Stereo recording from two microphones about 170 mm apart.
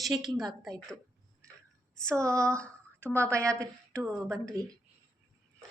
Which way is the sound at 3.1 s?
15° right (ahead or behind).